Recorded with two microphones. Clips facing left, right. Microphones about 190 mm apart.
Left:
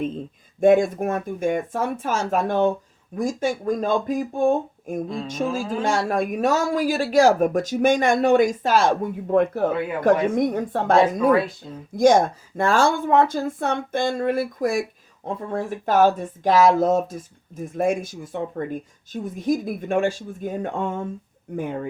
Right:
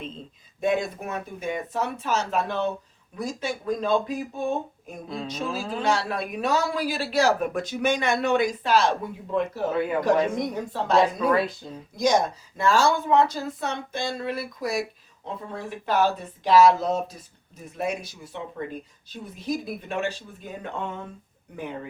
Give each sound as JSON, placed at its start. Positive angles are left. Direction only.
{"t": 0.6, "sound": "speech", "side_deg": 50}
{"t": 5.0, "sound": "speech", "side_deg": 0}
{"t": 5.3, "sound": "speech", "side_deg": 45}